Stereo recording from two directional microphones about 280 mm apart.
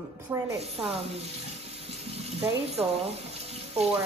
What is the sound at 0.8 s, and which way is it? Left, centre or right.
Speech, right.